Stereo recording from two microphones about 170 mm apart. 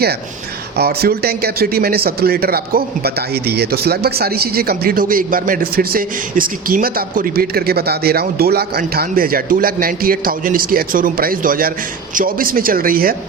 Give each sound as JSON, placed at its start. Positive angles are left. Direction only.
{"t": 0.8, "sound": "speech", "side_deg": -65}